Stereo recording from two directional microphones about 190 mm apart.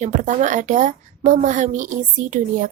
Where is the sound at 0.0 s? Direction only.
40° right (ahead or behind).